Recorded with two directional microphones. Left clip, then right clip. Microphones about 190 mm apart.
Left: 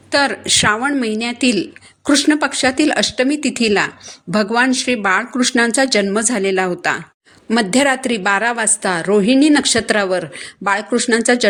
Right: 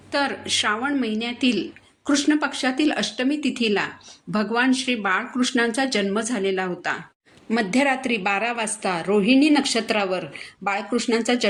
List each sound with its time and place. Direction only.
0.1 s a woman's voice: 40° left (ahead or behind)